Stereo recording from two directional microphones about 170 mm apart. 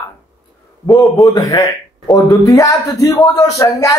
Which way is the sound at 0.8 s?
20° left (ahead or behind).